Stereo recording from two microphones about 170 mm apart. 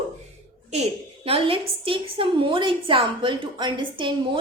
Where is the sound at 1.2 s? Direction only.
35° right (ahead or behind).